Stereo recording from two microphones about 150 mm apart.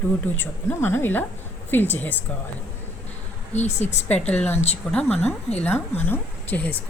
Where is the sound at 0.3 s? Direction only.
15° left (ahead or behind).